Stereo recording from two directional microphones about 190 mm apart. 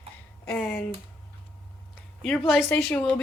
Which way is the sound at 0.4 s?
5° left (ahead or behind).